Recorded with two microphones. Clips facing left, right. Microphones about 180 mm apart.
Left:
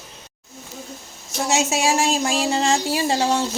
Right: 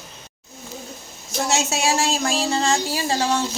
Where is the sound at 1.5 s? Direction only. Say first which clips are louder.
Left 2 dB; 15° left (ahead or behind).